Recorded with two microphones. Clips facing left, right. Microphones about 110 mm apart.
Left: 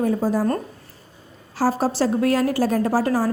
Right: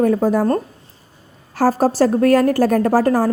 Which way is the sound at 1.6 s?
45° right (ahead or behind).